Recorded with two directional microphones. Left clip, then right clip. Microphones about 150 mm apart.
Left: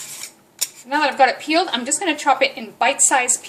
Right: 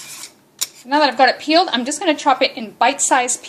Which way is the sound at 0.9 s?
40° right (ahead or behind).